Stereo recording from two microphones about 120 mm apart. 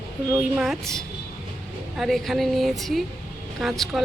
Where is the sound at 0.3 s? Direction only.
20° right (ahead or behind).